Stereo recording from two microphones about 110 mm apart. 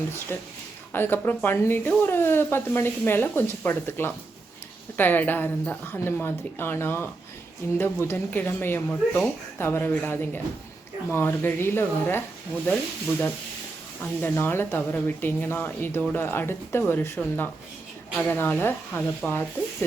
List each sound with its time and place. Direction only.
0.3 s speech: 20° left (ahead or behind)